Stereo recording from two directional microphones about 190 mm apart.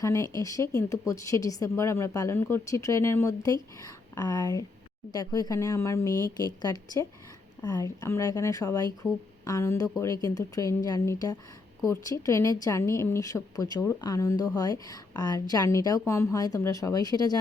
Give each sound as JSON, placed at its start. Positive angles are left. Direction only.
{"t": 0.0, "sound": "a woman's voice", "side_deg": 15}